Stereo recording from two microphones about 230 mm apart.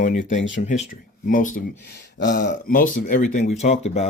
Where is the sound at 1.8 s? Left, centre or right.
Left.